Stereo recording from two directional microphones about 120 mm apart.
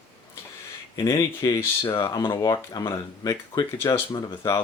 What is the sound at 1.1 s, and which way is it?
Speech, 25° left (ahead or behind).